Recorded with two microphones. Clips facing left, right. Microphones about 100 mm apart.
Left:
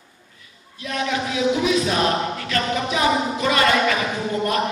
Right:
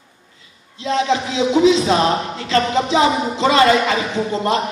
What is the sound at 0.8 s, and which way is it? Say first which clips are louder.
Speech: right 6 dB; 25° right (ahead or behind).